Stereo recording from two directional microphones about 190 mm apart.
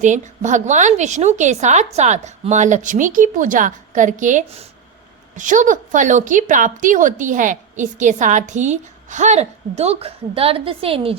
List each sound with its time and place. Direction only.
0.0 s a woman's voice: 40° right (ahead or behind)